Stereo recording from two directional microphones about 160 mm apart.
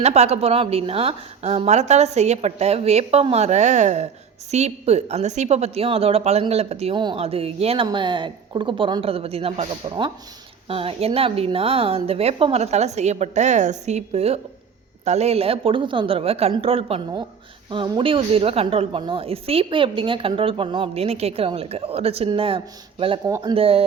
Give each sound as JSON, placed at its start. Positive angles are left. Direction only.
{"t": 0.0, "sound": "speech", "side_deg": -45}
{"t": 23.6, "sound": "speech", "side_deg": -35}